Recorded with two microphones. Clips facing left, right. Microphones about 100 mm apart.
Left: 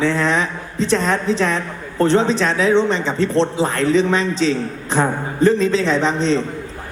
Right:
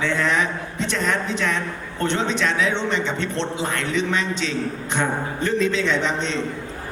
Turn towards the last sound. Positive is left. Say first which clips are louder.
# left 6 dB
turn(degrees=35)  # may be behind; listen again after turning